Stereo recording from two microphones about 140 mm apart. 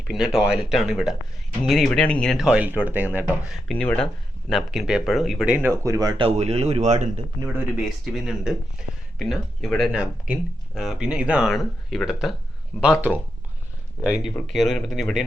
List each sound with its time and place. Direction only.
0.3 s speech: 5° right (ahead or behind)
2.5 s speech: 10° right (ahead or behind)
3.7 s speech: 10° left (ahead or behind); by 5.7 s 10° right (ahead or behind)
5.7 s speech: 20° right (ahead or behind)
6.2 s a man's voice: 50° right (ahead or behind)
7.9 s speech: centre (ahead or behind)